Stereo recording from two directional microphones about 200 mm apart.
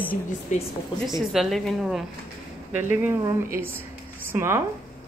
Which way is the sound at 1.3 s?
Centre (ahead or behind).